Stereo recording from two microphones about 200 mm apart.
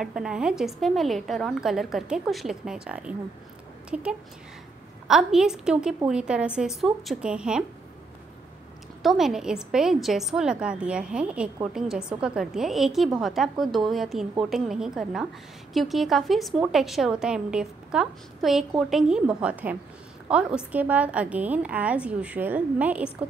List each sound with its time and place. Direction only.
0.0 s a woman's voice: 5° right (ahead or behind)
9.0 s a woman's voice: centre (ahead or behind)